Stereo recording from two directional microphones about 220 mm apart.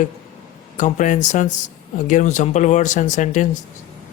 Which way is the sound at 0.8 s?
35° left (ahead or behind).